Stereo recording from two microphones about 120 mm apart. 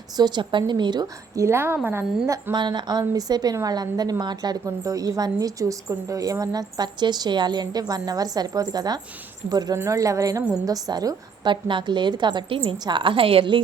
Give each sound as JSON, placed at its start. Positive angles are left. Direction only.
{"t": 0.2, "sound": "a woman's voice", "side_deg": -40}
{"t": 1.4, "sound": "a woman's voice", "side_deg": -20}